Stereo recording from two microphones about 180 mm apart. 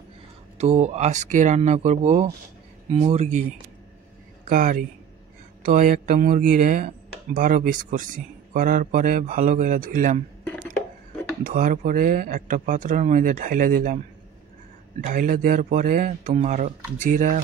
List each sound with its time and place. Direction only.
0.6 s speech: 35° right (ahead or behind)
4.5 s a man's voice: 50° right (ahead or behind)
11.4 s a man's voice: 45° right (ahead or behind)
15.0 s a man's voice: 50° right (ahead or behind)